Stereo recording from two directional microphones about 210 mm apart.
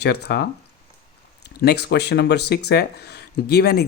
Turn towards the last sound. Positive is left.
turn(degrees=50)  # may be behind; listen again after turning